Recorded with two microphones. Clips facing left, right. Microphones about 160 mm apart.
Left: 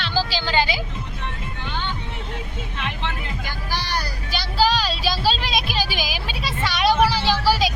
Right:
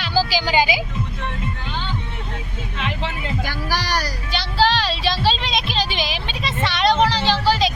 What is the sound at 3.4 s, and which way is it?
Speech, 90° right.